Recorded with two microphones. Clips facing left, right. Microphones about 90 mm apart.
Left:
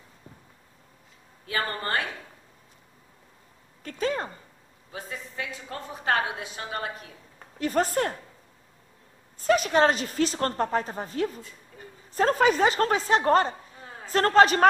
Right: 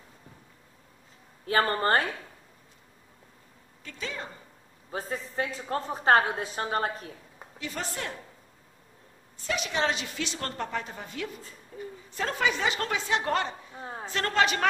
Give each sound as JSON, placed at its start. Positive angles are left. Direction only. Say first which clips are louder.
{"t": 1.4, "sound": "a woman's voice", "louder": "right 5 dB", "side_deg": -40}
{"t": 3.8, "sound": "speech", "louder": "left 9 dB", "side_deg": 45}
{"t": 4.9, "sound": "a woman's voice", "louder": "right 4 dB", "side_deg": -35}
{"t": 7.5, "sound": "speech", "louder": "left 11 dB", "side_deg": 45}
{"t": 9.4, "sound": "a woman's voice", "louder": "left 8 dB", "side_deg": 45}
{"t": 13.7, "sound": "a sound", "louder": "right 5 dB", "side_deg": -30}
{"t": 14.1, "sound": "a woman's voice", "louder": "left 7 dB", "side_deg": 40}